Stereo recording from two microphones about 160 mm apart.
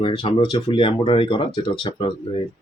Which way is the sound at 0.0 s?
30° left (ahead or behind).